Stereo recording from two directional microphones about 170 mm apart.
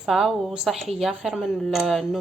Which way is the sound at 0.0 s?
Centre (ahead or behind).